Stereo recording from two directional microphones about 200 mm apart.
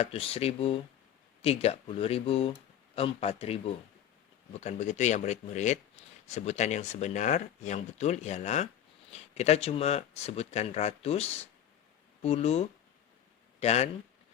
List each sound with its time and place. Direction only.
0.0 s speech: 30° left (ahead or behind)